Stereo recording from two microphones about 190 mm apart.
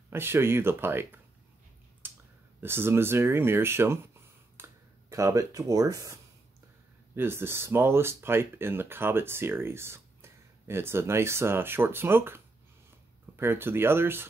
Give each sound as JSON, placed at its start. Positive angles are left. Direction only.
{"t": 0.1, "sound": "speech", "side_deg": -10}
{"t": 2.0, "sound": "clicking", "side_deg": -10}
{"t": 2.6, "sound": "speech", "side_deg": -10}
{"t": 7.2, "sound": "speech", "side_deg": -10}
{"t": 13.4, "sound": "speech", "side_deg": -10}